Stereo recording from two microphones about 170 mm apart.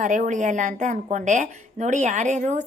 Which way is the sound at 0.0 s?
45° right (ahead or behind).